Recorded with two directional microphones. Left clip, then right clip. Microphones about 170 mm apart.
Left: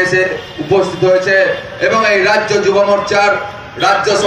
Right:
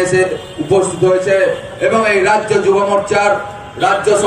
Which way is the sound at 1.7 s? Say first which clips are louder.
Left 1 dB; 90° right.